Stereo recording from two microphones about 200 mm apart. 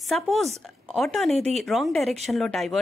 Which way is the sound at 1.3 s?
30° right (ahead or behind).